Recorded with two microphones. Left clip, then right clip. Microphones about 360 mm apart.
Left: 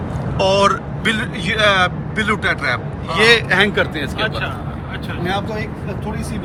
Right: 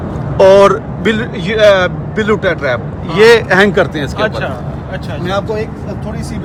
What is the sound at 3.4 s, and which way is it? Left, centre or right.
Speech, right.